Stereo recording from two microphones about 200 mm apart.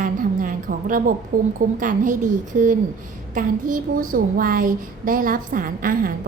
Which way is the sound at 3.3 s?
40° right (ahead or behind).